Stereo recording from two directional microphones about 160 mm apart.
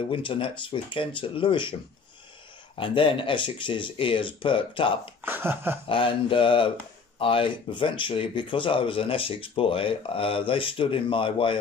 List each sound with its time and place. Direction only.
0.1 s speech: 35° left (ahead or behind)
2.8 s speech: 35° left (ahead or behind)
5.2 s a sound: 15° right (ahead or behind)
5.9 s speech: 30° left (ahead or behind)